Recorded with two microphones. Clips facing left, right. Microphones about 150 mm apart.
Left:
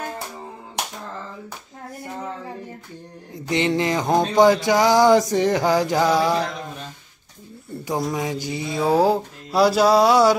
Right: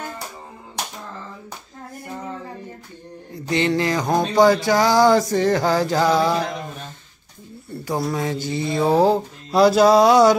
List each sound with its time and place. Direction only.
3.3 s a sound: 20° left (ahead or behind)
4.4 s music: 20° left (ahead or behind)
8.1 s music: 15° left (ahead or behind)